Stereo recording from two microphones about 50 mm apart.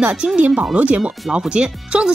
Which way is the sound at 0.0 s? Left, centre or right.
Centre.